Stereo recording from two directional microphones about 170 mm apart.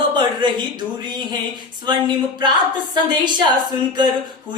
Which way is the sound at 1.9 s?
25° right (ahead or behind).